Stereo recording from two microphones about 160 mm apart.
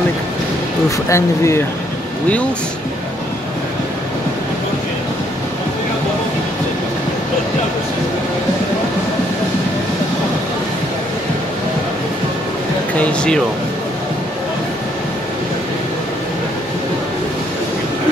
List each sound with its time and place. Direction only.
0.8 s speech: 20° left (ahead or behind)
13.0 s speech: 5° left (ahead or behind)